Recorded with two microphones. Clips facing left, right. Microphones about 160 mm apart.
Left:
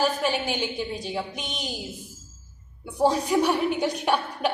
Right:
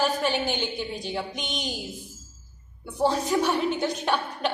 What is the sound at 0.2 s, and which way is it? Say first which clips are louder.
A woman's voice: even; 10° left (ahead or behind).